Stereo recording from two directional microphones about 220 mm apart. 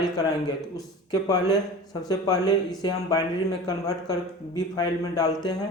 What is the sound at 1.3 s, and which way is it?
Speech, 15° left (ahead or behind).